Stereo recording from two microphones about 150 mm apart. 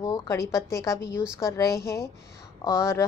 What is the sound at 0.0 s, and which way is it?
A woman's voice, 25° left (ahead or behind).